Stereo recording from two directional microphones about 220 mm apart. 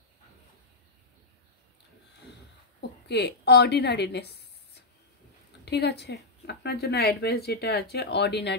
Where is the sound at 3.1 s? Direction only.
50° left (ahead or behind).